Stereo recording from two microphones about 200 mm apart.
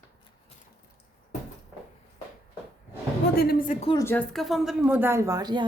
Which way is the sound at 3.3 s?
50° left (ahead or behind).